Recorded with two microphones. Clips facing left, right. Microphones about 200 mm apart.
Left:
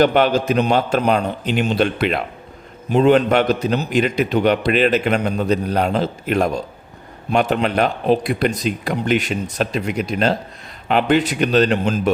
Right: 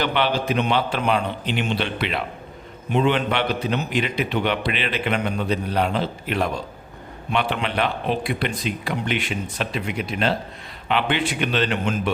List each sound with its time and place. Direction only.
0.0 s a man's voice: 45° left (ahead or behind)